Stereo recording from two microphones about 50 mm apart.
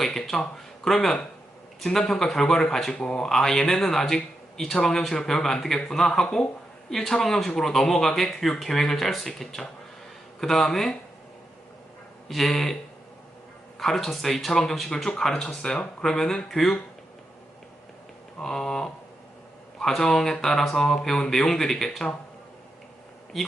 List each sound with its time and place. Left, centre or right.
0.0 s speech: centre
12.3 s speech: centre
13.7 s speech: centre
18.3 s speech: centre
23.3 s speech: centre